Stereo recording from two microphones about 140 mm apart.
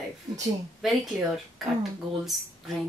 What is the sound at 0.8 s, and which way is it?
Speech, centre (ahead or behind).